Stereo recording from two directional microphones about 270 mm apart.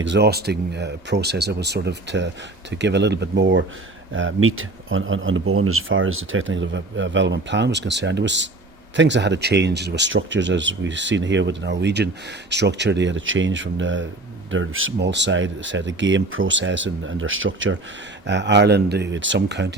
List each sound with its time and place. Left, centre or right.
0.0 s speech: right